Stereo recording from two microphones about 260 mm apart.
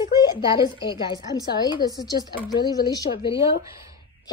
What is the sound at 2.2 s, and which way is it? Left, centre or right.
Speech, centre.